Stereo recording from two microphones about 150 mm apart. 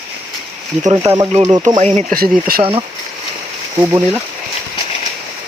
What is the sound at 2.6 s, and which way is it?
Speech, 35° right (ahead or behind).